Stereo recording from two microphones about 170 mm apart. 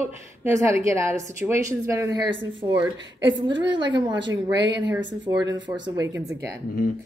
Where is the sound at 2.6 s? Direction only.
35° right (ahead or behind); by 6.4 s 20° right (ahead or behind).